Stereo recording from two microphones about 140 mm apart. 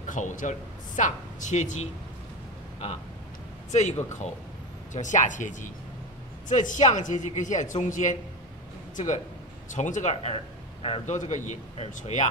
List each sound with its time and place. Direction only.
0.0 s speech: 65° left (ahead or behind)
3.7 s speech: 55° left (ahead or behind)
10.3 s a sound: 40° left (ahead or behind)
11.1 s speech: 60° left (ahead or behind)